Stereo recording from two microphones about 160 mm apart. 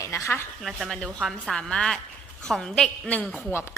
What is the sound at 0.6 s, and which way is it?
A woman's voice, centre (ahead or behind).